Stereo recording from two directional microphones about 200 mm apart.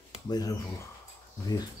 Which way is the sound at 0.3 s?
20° left (ahead or behind).